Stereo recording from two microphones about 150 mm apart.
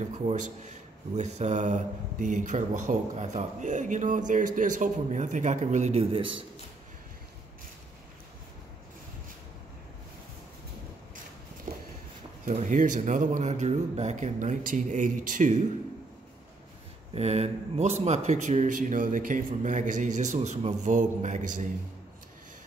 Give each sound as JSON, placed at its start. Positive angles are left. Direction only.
{"t": 0.3, "sound": "a man's voice", "side_deg": -50}
{"t": 12.4, "sound": "speech", "side_deg": -55}
{"t": 17.1, "sound": "a man's voice", "side_deg": -45}